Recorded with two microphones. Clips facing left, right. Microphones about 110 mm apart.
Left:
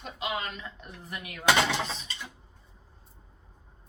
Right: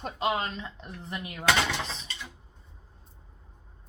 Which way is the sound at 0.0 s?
40° right (ahead or behind).